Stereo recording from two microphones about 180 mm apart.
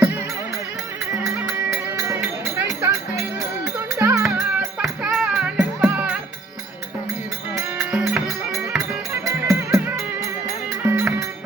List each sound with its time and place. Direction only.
2.6 s music: 15° right (ahead or behind)
4.2 s music: 5° right (ahead or behind)
7.5 s music: 10° right (ahead or behind)